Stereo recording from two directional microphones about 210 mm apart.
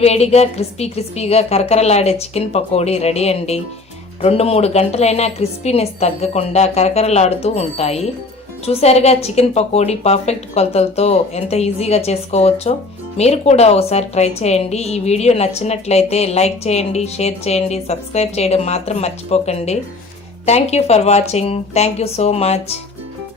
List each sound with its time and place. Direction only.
0.0 s a woman's voice: 30° left (ahead or behind)